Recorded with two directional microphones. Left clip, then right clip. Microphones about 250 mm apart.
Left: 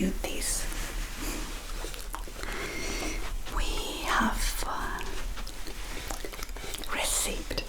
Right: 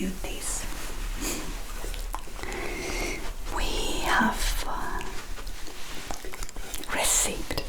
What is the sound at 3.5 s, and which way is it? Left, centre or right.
Whispering, right.